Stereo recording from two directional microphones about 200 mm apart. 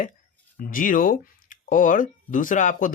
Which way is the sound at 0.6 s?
40° left (ahead or behind).